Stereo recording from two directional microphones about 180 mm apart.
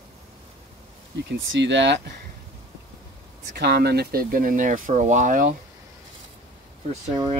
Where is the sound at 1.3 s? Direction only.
80° right.